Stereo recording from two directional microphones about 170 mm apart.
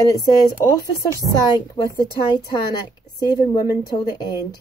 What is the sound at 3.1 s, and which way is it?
A woman's voice, 20° left (ahead or behind).